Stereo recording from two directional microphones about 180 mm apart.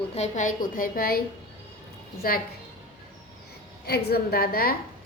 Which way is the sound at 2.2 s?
55° left (ahead or behind).